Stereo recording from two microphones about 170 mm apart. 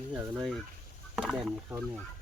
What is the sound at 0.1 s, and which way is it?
Speech, 10° right (ahead or behind).